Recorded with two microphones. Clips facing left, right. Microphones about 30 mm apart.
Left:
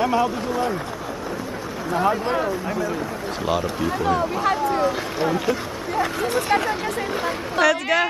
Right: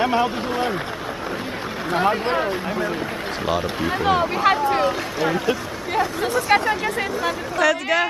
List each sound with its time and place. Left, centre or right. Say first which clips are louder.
0.0 s speech: right 1 dB; right
0.5 s speech: even; right
2.0 s speech: even; right
4.0 s speech: right 4 dB; right
6.5 s speech: right 4 dB; right
7.6 s a woman's voice: even; centre